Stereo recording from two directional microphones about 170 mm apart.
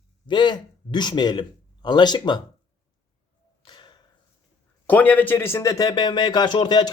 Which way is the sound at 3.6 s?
25° left (ahead or behind).